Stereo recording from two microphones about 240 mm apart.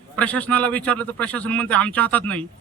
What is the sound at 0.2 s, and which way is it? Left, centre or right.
Speech, centre.